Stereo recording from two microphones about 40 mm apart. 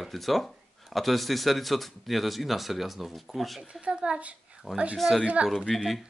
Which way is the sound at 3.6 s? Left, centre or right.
Right.